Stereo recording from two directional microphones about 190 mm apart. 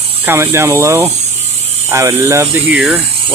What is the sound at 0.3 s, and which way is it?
Speech, 15° right (ahead or behind).